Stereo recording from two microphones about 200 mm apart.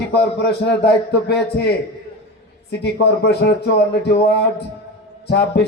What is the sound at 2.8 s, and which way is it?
Speech, 55° left (ahead or behind).